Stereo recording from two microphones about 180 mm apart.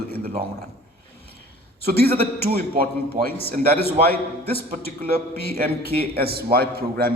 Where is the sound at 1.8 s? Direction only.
60° right (ahead or behind).